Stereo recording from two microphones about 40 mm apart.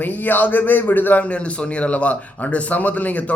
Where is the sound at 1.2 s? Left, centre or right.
Left.